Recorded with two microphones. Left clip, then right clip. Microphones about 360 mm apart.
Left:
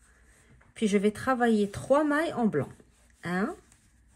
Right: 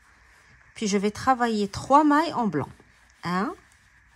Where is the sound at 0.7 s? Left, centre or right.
Right.